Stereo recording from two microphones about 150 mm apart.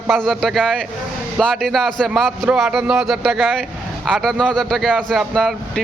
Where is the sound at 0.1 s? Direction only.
Centre (ahead or behind).